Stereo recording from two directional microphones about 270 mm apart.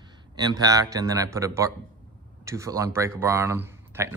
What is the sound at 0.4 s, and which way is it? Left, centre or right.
Speech, centre.